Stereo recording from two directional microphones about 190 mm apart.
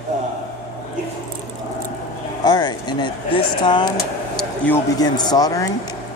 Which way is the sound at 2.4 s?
25° left (ahead or behind).